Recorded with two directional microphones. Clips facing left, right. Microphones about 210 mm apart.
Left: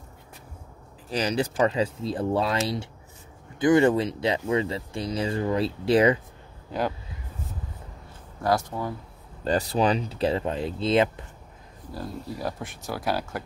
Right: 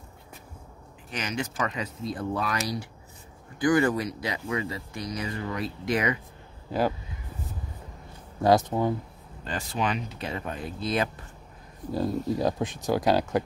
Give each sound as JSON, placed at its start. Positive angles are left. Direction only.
{"t": 1.1, "sound": "speech", "side_deg": 35}
{"t": 8.4, "sound": "speech", "side_deg": -20}
{"t": 9.4, "sound": "speech", "side_deg": 35}
{"t": 11.9, "sound": "speech", "side_deg": -20}